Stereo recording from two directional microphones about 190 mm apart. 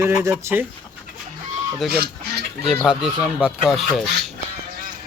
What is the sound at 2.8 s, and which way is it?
Speech, 5° right (ahead or behind).